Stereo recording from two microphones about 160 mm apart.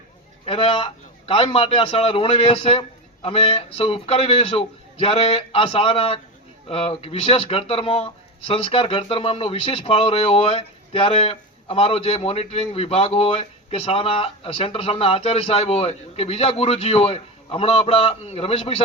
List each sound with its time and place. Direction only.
0.4 s speech: 35° left (ahead or behind)